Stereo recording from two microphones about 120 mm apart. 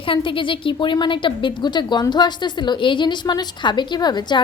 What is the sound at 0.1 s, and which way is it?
A woman's voice, 45° left (ahead or behind).